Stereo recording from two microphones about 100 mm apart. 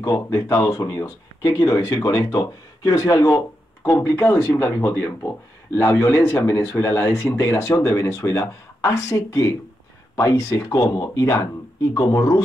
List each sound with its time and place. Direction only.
0.0 s speech: 35° left (ahead or behind)